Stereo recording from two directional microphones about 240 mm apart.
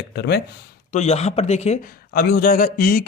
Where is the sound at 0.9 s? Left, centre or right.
Left.